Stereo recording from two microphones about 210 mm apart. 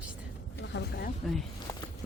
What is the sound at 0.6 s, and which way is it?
Speech, 50° left (ahead or behind).